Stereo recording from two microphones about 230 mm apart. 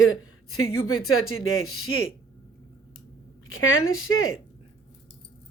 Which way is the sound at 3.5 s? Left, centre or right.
Left.